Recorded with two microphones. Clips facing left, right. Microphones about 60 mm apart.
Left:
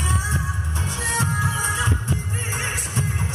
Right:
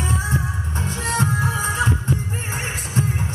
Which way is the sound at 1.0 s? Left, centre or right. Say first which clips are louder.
Right 2 dB; right.